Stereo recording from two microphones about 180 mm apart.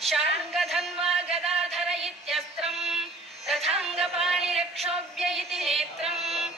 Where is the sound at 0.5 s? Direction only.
Centre (ahead or behind).